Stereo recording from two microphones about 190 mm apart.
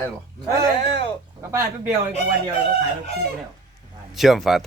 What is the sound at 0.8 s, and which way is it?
Speech, 30° left (ahead or behind).